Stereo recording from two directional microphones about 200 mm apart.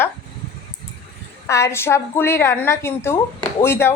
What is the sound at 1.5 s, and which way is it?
Speech, 15° left (ahead or behind).